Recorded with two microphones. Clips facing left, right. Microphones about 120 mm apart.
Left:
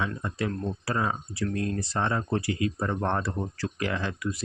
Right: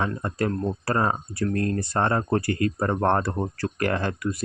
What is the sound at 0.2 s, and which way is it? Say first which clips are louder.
Speech: right 5 dB; 50° right (ahead or behind).